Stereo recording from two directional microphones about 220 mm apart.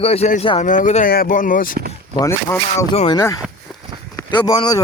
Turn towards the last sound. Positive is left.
turn(degrees=20)  # may be behind; listen again after turning